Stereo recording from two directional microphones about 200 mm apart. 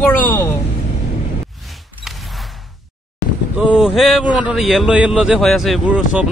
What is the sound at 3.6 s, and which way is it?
Boat, 5° right (ahead or behind).